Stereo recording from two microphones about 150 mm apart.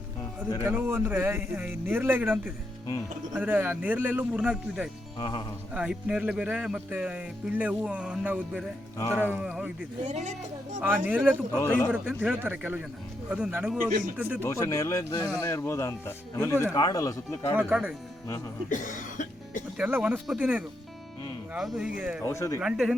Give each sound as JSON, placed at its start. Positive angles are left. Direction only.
{"t": 0.6, "sound": "speech", "side_deg": -15}
{"t": 5.2, "sound": "speech", "side_deg": 30}
{"t": 5.7, "sound": "speech", "side_deg": -10}
{"t": 10.1, "sound": "speech", "side_deg": -50}
{"t": 10.8, "sound": "speech", "side_deg": -15}
{"t": 11.6, "sound": "speech", "side_deg": 15}
{"t": 11.9, "sound": "speech", "side_deg": -10}
{"t": 14.4, "sound": "speech", "side_deg": 20}
{"t": 17.7, "sound": "speech", "side_deg": -10}
{"t": 18.7, "sound": "cough", "side_deg": 60}
{"t": 19.7, "sound": "speech", "side_deg": -10}
{"t": 22.3, "sound": "speech", "side_deg": 20}
{"t": 22.6, "sound": "speech", "side_deg": -5}